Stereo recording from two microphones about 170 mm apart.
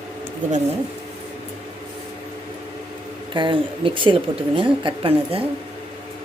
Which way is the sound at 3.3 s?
30° right (ahead or behind).